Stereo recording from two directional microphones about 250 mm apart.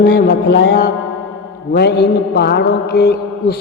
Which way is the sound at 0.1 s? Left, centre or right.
Left.